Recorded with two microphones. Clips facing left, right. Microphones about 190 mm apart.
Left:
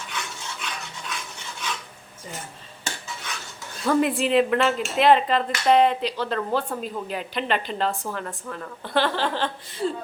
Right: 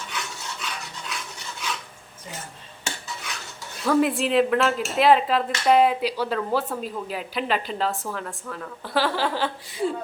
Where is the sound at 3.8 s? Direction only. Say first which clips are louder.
Even; centre (ahead or behind).